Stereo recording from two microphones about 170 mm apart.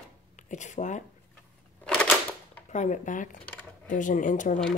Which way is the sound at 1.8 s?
5° left (ahead or behind).